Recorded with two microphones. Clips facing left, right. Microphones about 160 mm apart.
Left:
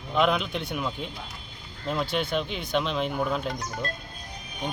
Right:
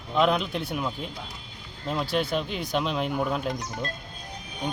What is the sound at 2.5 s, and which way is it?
Speech, 5° right (ahead or behind).